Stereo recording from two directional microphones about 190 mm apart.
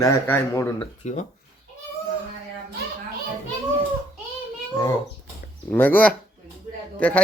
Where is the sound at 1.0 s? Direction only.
35° left (ahead or behind).